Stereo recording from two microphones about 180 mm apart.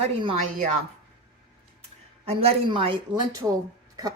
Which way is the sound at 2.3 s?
35° right (ahead or behind).